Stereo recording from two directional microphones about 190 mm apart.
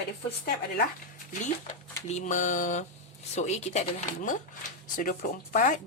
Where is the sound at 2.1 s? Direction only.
35° left (ahead or behind).